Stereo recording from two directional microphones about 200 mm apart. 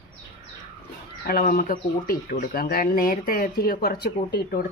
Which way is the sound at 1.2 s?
45° left (ahead or behind).